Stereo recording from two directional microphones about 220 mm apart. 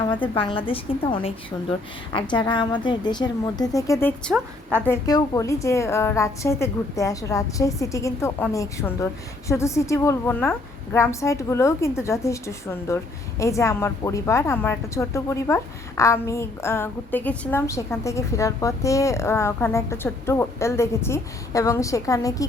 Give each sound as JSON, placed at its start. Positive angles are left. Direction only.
{"t": 0.1, "sound": "a woman's voice", "side_deg": 20}